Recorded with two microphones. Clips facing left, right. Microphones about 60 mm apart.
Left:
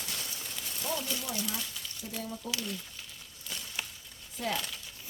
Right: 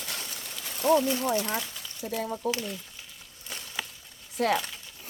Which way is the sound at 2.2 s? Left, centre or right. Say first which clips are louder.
Right 7 dB; right.